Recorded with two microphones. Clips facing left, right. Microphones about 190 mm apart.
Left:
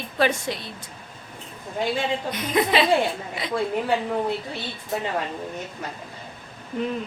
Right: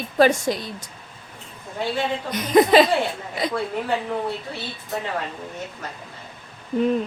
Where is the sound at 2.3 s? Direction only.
40° right (ahead or behind).